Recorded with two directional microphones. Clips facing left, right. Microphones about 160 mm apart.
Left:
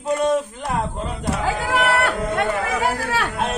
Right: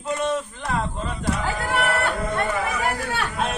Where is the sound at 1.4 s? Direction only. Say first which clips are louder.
Left 6 dB; 90° left.